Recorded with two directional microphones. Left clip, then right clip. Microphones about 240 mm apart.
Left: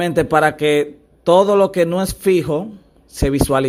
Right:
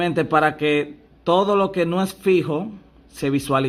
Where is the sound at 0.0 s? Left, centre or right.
Left.